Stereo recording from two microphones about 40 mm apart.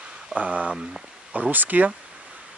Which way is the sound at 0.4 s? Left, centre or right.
Right.